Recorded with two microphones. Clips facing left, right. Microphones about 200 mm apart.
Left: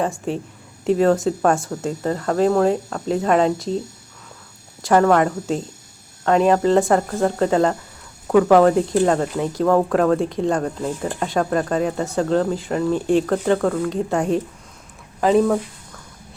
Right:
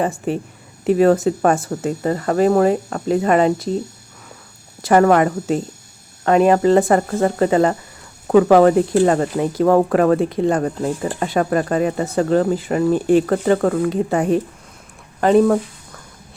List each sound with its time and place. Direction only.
0.0 s speech: 5° right (ahead or behind)
4.8 s speech: 5° right (ahead or behind)
8.3 s speech: 20° right (ahead or behind)
8.5 s speech: 5° right (ahead or behind)